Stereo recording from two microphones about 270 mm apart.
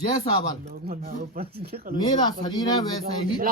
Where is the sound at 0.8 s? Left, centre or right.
Right.